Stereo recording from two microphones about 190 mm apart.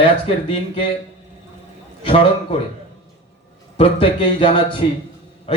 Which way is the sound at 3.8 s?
30° left (ahead or behind).